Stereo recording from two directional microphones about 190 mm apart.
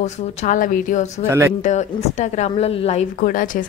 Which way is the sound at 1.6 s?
40° left (ahead or behind).